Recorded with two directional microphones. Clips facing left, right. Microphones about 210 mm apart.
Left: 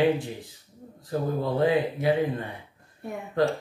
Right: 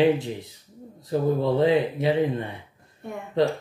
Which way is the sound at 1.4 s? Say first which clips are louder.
Right 1 dB; 20° right (ahead or behind).